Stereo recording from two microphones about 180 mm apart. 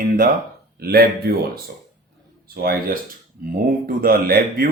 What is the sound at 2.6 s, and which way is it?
Speech, 55° right (ahead or behind).